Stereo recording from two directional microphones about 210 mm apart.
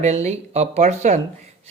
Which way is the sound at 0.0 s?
30° right (ahead or behind).